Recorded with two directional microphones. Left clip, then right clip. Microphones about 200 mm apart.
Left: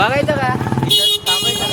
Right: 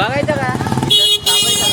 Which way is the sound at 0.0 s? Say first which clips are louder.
Left 2 dB; 40° left (ahead or behind).